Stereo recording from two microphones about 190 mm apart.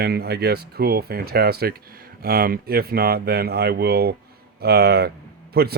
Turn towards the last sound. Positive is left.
turn(degrees=-55)  # may be behind; listen again after turning